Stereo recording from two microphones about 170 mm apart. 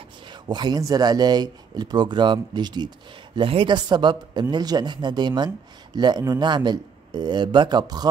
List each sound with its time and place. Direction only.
0.3 s speech: 25° right (ahead or behind)